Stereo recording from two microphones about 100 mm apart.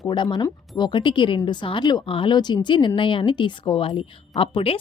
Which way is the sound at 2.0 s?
60° left (ahead or behind).